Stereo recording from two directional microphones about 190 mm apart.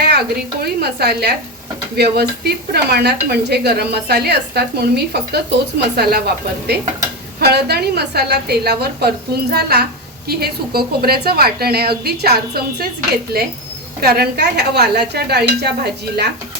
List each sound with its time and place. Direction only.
0.0 s speech: 55° right (ahead or behind)